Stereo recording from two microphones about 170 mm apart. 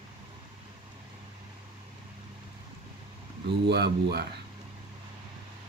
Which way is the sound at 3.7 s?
75° right (ahead or behind).